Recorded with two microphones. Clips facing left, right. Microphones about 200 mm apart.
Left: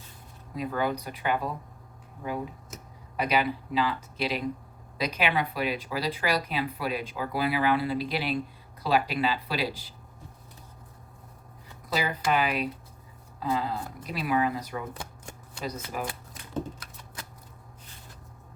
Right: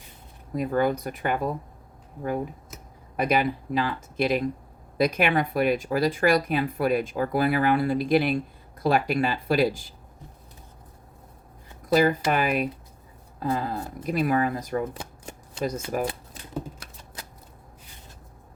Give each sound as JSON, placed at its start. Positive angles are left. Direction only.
{"t": 0.5, "sound": "speech", "side_deg": -50}
{"t": 11.9, "sound": "speech", "side_deg": -50}
{"t": 14.9, "sound": "shuffling cards", "side_deg": -20}